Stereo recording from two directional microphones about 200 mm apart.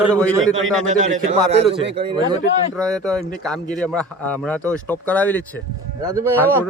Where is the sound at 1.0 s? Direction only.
30° right (ahead or behind).